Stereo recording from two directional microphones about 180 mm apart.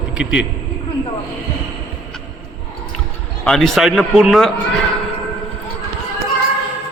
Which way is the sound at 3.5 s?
Centre (ahead or behind).